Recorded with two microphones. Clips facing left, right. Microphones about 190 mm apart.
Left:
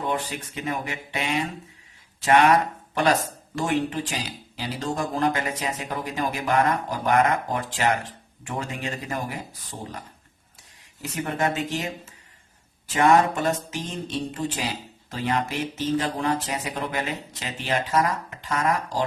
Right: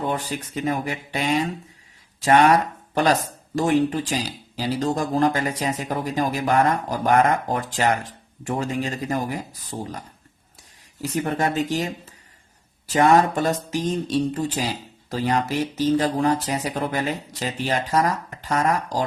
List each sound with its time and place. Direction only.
0.1 s speech: 35° right (ahead or behind)
11.0 s speech: 35° right (ahead or behind)
12.9 s speech: 35° right (ahead or behind)